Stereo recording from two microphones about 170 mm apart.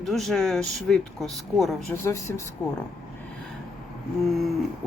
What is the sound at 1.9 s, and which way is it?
Speech, 15° left (ahead or behind).